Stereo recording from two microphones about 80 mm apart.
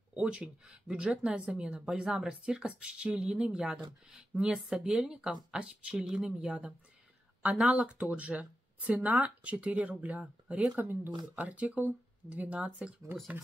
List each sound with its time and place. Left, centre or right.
0.1 s speech: centre